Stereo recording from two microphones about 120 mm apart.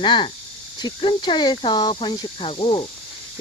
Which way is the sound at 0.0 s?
40° left (ahead or behind).